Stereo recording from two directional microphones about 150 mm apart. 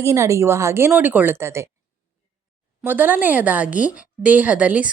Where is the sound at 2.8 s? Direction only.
10° right (ahead or behind).